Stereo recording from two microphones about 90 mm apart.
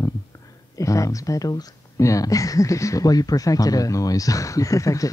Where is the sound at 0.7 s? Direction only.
35° left (ahead or behind).